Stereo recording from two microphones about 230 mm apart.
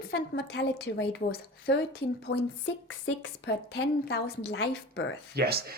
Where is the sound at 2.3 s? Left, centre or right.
Left.